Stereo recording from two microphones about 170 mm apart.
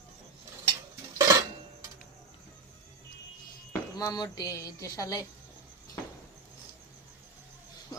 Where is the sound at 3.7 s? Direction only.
20° left (ahead or behind).